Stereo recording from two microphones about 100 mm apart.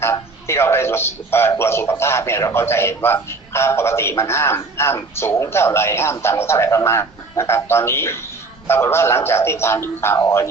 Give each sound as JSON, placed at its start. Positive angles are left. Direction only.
{"t": 0.0, "sound": "a man's voice", "side_deg": 25}